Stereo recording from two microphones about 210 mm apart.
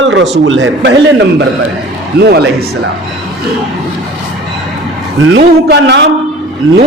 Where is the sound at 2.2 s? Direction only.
50° right (ahead or behind).